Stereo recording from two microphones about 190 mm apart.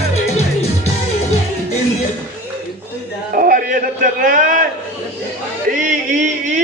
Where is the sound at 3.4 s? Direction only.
50° right (ahead or behind).